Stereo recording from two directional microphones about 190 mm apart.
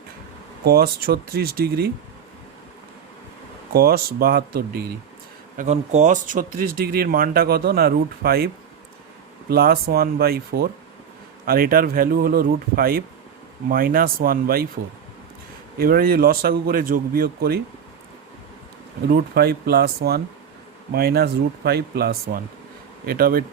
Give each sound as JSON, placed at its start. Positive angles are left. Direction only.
{"t": 0.6, "sound": "speech", "side_deg": -55}
{"t": 3.7, "sound": "speech", "side_deg": -55}
{"t": 5.5, "sound": "speech", "side_deg": -35}
{"t": 9.5, "sound": "speech", "side_deg": -55}
{"t": 15.8, "sound": "speech", "side_deg": -50}
{"t": 19.1, "sound": "speech", "side_deg": -55}